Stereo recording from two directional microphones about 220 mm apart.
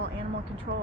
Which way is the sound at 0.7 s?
50° right (ahead or behind).